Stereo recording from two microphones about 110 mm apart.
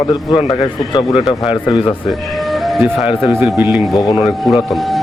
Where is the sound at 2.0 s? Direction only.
Centre (ahead or behind).